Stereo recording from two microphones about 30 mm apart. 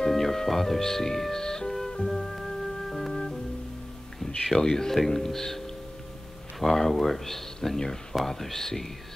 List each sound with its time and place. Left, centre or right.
0.1 s speech: centre
2.0 s music: centre
3.1 s music: centre
4.6 s speech: centre
6.6 s speech: centre